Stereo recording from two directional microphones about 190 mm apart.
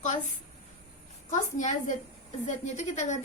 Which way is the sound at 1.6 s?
40° left (ahead or behind).